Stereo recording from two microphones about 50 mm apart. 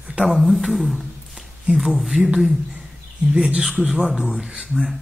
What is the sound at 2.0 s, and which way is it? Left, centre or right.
Speech, centre.